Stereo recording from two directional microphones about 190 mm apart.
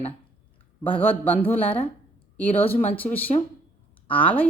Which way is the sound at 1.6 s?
30° left (ahead or behind).